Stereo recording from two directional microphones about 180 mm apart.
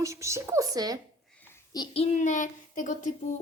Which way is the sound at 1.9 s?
40° left (ahead or behind).